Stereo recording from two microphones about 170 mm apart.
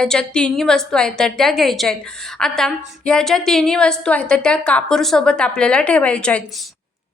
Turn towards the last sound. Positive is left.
turn(degrees=5)  # may be behind; listen again after turning